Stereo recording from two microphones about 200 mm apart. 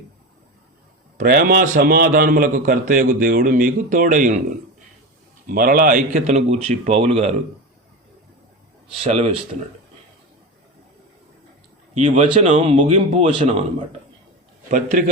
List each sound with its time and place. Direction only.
1.2 s a man's voice: 45° right (ahead or behind)
5.5 s speech: 45° right (ahead or behind)
9.0 s speech: 30° right (ahead or behind)
11.9 s speech: 35° right (ahead or behind)
14.7 s speech: 40° right (ahead or behind)